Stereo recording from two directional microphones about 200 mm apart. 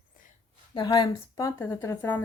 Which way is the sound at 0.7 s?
20° left (ahead or behind).